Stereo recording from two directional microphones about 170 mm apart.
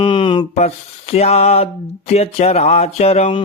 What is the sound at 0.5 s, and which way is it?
Mantra, 40° left (ahead or behind).